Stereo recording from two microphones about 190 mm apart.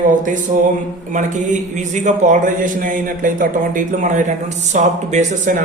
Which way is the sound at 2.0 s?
40° right (ahead or behind).